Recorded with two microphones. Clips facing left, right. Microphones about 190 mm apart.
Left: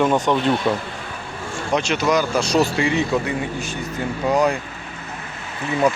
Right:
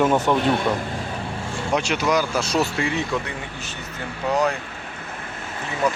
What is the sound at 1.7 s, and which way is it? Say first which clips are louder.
Speech: left 2 dB; 10° right (ahead or behind).